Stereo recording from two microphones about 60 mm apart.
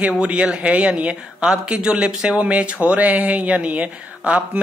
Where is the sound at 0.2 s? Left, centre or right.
Centre.